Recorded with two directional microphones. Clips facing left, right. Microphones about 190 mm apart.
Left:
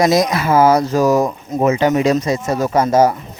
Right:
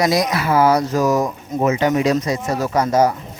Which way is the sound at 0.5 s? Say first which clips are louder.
Left 3 dB; 45° left (ahead or behind).